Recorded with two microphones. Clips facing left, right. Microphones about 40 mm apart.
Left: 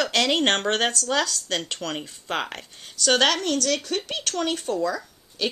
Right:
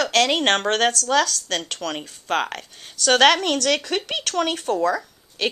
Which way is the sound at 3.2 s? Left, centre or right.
Right.